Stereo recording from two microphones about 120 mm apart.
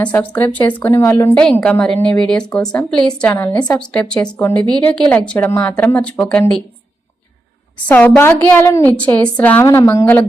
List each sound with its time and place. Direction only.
0.0 s a woman's voice: 10° left (ahead or behind)
1.6 s a woman's voice: 10° left (ahead or behind)
7.9 s a woman's voice: 15° left (ahead or behind)